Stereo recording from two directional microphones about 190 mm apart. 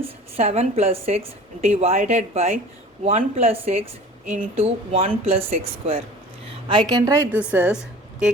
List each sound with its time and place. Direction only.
0.0 s speech: 35° right (ahead or behind)
6.7 s a woman's voice: 25° right (ahead or behind); by 8.3 s 5° right (ahead or behind)